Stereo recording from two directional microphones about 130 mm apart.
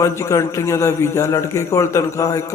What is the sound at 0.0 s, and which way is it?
A man's voice, 20° left (ahead or behind).